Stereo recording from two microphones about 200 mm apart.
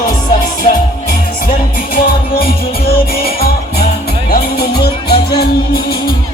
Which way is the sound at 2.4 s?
50° left (ahead or behind).